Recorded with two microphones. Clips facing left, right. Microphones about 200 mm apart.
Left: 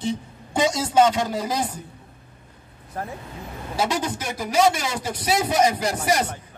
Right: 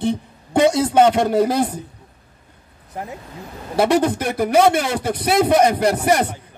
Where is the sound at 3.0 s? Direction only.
20° right (ahead or behind).